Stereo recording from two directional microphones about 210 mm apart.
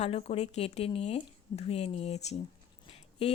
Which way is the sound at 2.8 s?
30° left (ahead or behind).